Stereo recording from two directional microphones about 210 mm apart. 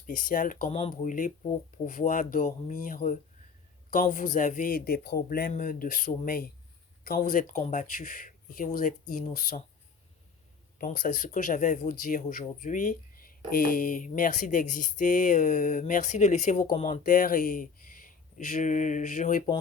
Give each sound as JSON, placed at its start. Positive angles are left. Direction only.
{"t": 0.1, "sound": "speech", "side_deg": 40}
{"t": 0.8, "sound": "speech", "side_deg": 30}
{"t": 1.1, "sound": "speech", "side_deg": 40}
{"t": 10.8, "sound": "speech", "side_deg": 40}